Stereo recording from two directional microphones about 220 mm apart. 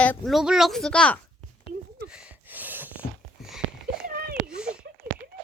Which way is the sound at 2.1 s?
5° right (ahead or behind).